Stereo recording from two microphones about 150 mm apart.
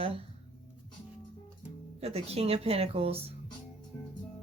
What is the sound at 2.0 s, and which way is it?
Speech, 45° right (ahead or behind).